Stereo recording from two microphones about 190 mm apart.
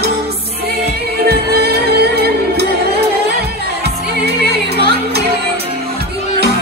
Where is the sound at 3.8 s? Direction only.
60° right (ahead or behind).